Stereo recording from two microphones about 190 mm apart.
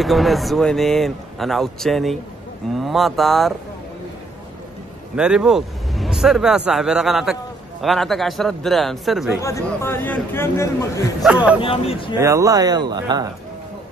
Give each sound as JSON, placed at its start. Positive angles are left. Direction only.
{"t": 0.0, "sound": "speech", "side_deg": 0}
{"t": 5.1, "sound": "speech", "side_deg": -5}
{"t": 9.4, "sound": "speech", "side_deg": 15}
{"t": 11.2, "sound": "speech", "side_deg": -5}
{"t": 11.6, "sound": "speech", "side_deg": 30}
{"t": 12.2, "sound": "speech", "side_deg": -15}